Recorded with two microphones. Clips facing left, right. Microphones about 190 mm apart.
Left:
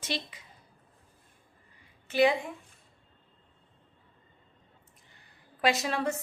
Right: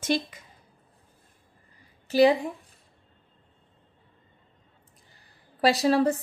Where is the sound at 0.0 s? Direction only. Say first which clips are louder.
Right 9 dB; 45° right (ahead or behind).